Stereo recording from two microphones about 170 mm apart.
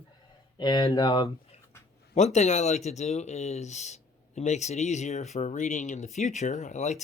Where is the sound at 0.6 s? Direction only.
25° left (ahead or behind).